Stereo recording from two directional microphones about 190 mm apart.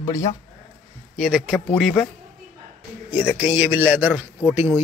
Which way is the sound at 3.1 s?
5° right (ahead or behind).